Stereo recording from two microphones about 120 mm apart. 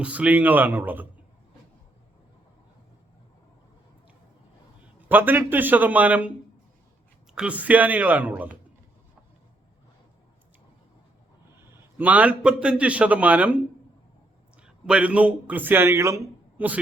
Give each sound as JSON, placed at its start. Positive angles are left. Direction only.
{"t": 0.0, "sound": "a man's voice", "side_deg": -10}
{"t": 4.9, "sound": "a man's voice", "side_deg": -15}
{"t": 7.3, "sound": "a man's voice", "side_deg": -10}
{"t": 11.7, "sound": "a man's voice", "side_deg": -15}
{"t": 14.6, "sound": "speech", "side_deg": -10}